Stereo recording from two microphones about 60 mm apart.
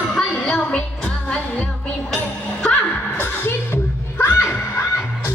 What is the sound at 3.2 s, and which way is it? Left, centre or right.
Music, left.